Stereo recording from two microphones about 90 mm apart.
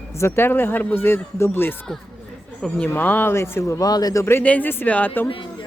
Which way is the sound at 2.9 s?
20° left (ahead or behind).